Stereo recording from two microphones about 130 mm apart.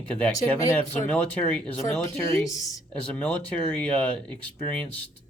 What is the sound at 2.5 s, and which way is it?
Speech, 25° left (ahead or behind).